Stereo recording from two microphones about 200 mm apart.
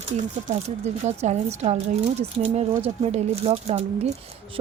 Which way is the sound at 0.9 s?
35° right (ahead or behind).